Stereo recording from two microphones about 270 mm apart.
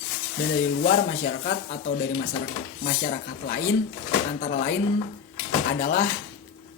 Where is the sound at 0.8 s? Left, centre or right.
Left.